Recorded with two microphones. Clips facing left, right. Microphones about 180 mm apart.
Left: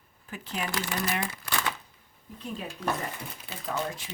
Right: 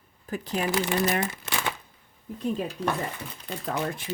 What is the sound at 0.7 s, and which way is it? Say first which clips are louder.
Speech: right 10 dB; 20° right (ahead or behind).